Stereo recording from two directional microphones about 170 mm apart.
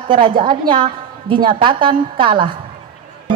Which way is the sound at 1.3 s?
30° right (ahead or behind).